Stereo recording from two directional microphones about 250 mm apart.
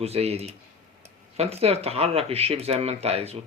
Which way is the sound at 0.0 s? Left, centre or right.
Right.